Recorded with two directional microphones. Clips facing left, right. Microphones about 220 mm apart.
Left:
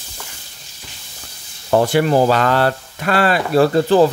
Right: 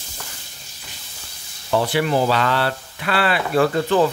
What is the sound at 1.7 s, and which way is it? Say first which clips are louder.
Speech: left 5 dB; 45° left (ahead or behind).